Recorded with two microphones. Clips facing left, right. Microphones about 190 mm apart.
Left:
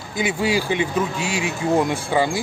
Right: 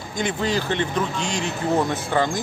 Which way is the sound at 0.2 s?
10° left (ahead or behind).